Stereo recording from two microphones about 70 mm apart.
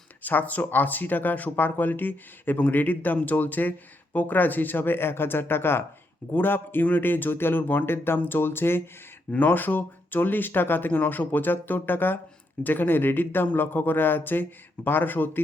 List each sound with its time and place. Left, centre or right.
0.2 s speech: left